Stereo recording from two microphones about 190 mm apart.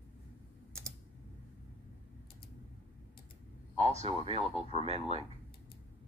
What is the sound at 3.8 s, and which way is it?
Speech, 35° right (ahead or behind).